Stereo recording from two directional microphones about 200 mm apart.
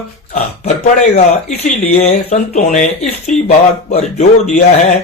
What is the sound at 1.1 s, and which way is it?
Speech, 35° left (ahead or behind).